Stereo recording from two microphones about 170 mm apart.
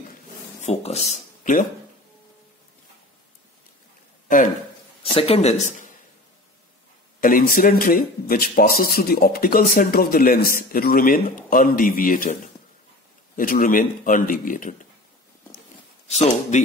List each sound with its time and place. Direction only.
0.6 s speech: 40° left (ahead or behind)
5.0 s speech: 35° left (ahead or behind)
7.2 s speech: 55° left (ahead or behind)
13.4 s speech: 55° left (ahead or behind)
16.1 s speech: 45° left (ahead or behind)